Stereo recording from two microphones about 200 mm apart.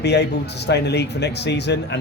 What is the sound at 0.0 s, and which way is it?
Speech, 55° left (ahead or behind).